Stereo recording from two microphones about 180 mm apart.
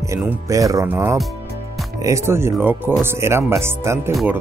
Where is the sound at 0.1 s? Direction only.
15° right (ahead or behind).